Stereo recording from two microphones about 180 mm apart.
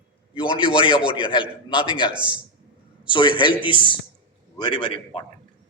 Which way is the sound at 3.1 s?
25° left (ahead or behind).